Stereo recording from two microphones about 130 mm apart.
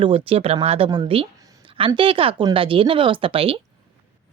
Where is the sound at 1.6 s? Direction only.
45° right (ahead or behind).